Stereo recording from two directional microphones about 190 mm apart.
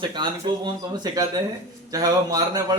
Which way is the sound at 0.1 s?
25° right (ahead or behind).